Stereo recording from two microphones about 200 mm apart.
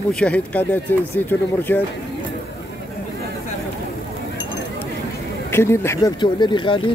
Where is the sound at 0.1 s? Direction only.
5° left (ahead or behind).